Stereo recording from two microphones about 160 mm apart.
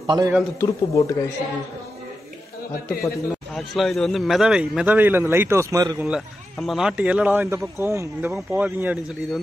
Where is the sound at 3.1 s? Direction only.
Centre (ahead or behind); by 6.0 s 20° right (ahead or behind).